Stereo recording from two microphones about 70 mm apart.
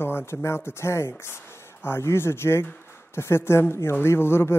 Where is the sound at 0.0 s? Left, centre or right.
Left.